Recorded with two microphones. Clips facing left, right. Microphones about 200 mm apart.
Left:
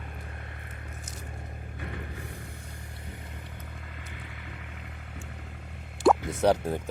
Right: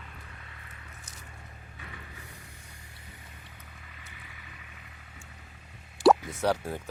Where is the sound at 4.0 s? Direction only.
60° left (ahead or behind).